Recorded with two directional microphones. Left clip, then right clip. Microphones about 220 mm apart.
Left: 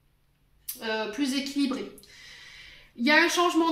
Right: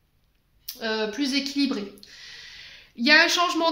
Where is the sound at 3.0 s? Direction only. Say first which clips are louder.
Right 4 dB; 40° right (ahead or behind).